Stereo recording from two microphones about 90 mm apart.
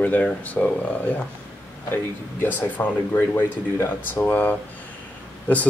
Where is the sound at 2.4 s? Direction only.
20° left (ahead or behind).